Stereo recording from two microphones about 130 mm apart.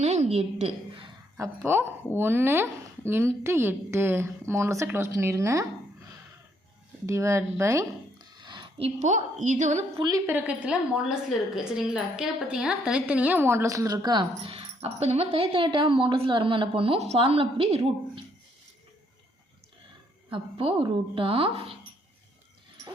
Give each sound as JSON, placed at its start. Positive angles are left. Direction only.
{"t": 0.0, "sound": "a sound", "side_deg": -60}
{"t": 1.4, "sound": "a woman's voice", "side_deg": -20}
{"t": 7.0, "sound": "a woman's voice", "side_deg": -25}
{"t": 8.4, "sound": "a sound", "side_deg": -35}
{"t": 9.0, "sound": "a woman's voice", "side_deg": -65}
{"t": 10.2, "sound": "a woman's voice", "side_deg": -15}
{"t": 14.5, "sound": "speech", "side_deg": -50}
{"t": 20.3, "sound": "speech", "side_deg": -40}